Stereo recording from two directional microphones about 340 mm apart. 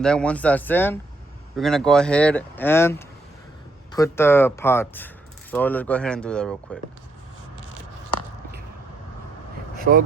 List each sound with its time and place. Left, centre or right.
0.0 s speech: centre
9.7 s vehicle: right